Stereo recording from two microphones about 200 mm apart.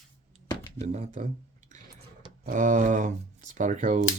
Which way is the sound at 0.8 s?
35° right (ahead or behind).